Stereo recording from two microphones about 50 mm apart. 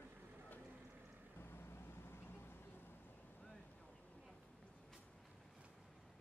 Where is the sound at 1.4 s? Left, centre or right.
Left.